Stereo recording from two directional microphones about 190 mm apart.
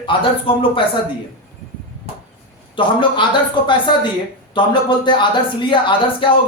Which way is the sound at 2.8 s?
25° left (ahead or behind).